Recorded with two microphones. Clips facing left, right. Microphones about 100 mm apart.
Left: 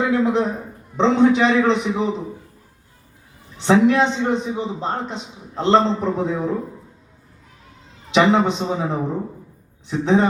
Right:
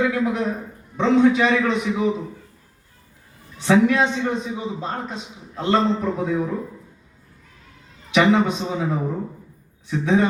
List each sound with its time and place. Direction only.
0.0 s a man's voice: 25° left (ahead or behind)
3.6 s a man's voice: 25° left (ahead or behind)
8.1 s a man's voice: 25° left (ahead or behind)